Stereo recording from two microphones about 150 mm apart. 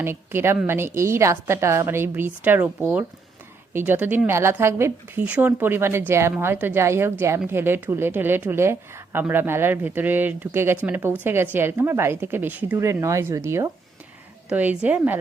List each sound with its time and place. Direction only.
0.0 s a woman's voice: 15° right (ahead or behind)